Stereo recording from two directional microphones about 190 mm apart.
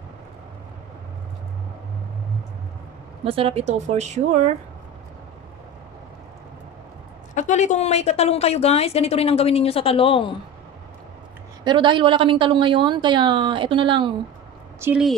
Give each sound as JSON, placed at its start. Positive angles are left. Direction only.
{"t": 3.3, "sound": "a woman's voice", "side_deg": -30}
{"t": 7.3, "sound": "a woman's voice", "side_deg": 40}
{"t": 11.6, "sound": "a woman's voice", "side_deg": -25}
{"t": 14.8, "sound": "speech", "side_deg": -5}